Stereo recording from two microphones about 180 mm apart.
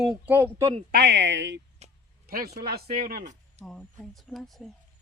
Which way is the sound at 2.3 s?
55° right (ahead or behind).